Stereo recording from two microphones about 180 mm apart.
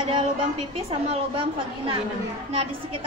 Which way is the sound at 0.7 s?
35° right (ahead or behind).